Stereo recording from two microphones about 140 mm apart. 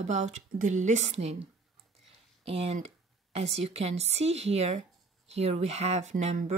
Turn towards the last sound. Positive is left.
turn(degrees=-55)  # may be behind; listen again after turning